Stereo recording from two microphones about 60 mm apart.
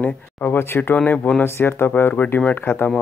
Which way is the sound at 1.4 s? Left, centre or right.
Left.